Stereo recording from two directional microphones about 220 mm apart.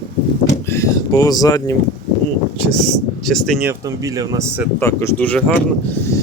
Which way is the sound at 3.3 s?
Centre (ahead or behind).